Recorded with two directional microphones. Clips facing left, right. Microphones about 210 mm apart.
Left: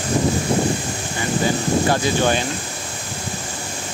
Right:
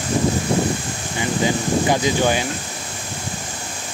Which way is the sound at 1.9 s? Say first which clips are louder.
Right 2 dB; 15° right (ahead or behind).